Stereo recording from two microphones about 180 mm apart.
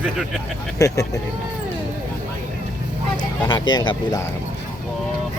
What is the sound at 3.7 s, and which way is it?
Speech, 25° left (ahead or behind).